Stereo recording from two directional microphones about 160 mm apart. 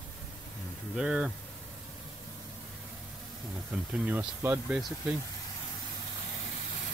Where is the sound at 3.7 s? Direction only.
10° right (ahead or behind).